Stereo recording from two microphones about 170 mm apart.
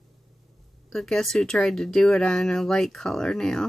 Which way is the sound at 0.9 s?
Centre (ahead or behind).